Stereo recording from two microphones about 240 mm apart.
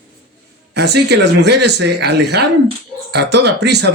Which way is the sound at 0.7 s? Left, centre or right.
Right.